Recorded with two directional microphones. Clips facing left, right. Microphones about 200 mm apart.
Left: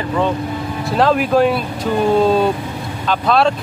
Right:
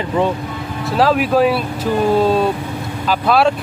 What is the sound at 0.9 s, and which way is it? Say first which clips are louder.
Speech: even; centre (ahead or behind).